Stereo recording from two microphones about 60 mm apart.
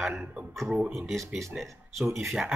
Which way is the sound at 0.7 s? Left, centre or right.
Centre.